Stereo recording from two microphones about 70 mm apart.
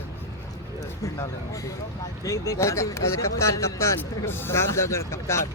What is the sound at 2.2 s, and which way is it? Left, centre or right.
Speech, left.